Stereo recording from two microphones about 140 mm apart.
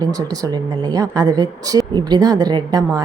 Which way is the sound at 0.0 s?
25° right (ahead or behind).